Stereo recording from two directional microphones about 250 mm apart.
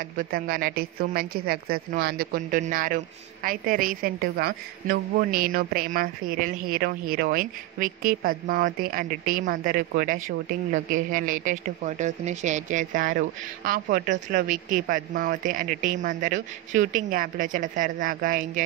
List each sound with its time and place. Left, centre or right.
0.2 s a woman's voice: right